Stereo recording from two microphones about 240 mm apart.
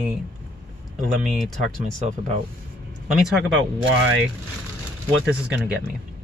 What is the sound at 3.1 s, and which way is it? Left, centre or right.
Speech, centre.